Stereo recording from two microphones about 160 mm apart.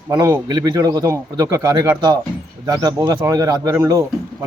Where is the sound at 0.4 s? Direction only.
25° right (ahead or behind).